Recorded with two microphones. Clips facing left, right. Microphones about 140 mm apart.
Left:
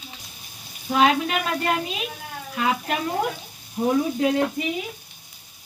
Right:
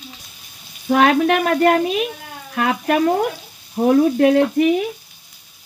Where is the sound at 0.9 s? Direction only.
55° right (ahead or behind).